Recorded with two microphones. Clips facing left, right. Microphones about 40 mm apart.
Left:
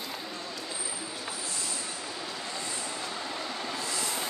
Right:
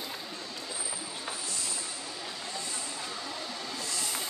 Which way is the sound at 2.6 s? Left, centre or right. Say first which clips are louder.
Left 2 dB; left.